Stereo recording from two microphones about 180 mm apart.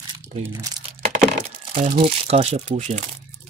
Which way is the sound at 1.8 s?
35° right (ahead or behind).